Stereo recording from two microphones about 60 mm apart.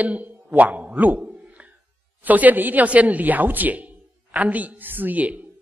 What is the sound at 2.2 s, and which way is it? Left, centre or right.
A man's voice, right.